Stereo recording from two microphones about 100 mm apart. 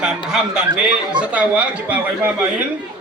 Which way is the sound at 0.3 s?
5° right (ahead or behind).